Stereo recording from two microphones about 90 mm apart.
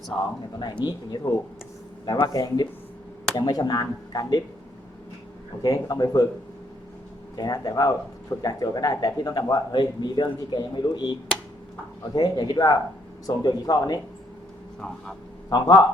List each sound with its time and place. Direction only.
0.6 s speech: 50° left (ahead or behind)
5.6 s speech: 45° left (ahead or behind)
7.3 s speech: 45° left (ahead or behind)
12.1 s speech: 50° left (ahead or behind)
14.8 s speech: 10° left (ahead or behind)
15.4 s speech: 45° left (ahead or behind)